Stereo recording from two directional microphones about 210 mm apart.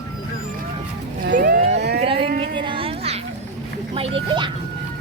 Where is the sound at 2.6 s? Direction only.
25° right (ahead or behind).